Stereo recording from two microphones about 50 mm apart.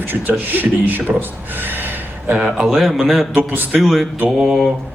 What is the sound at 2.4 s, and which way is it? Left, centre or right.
A man's voice, centre.